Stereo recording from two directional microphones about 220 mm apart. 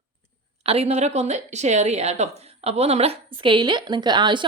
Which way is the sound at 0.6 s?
25° right (ahead or behind).